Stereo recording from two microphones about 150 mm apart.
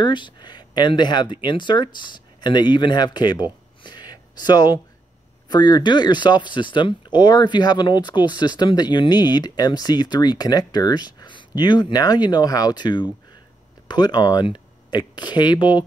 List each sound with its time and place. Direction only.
0.0 s speech: 30° left (ahead or behind)
3.8 s a sound: 30° left (ahead or behind)
5.5 s speech: 30° left (ahead or behind)